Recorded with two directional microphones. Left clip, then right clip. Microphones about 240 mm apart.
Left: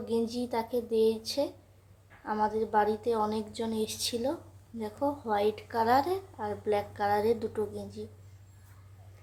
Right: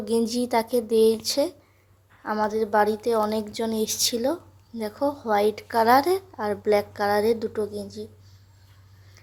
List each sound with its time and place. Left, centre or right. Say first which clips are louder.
0.0 s speech: right 7 dB; right